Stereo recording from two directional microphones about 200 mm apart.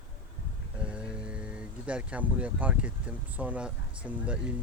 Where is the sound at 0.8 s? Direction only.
5° right (ahead or behind).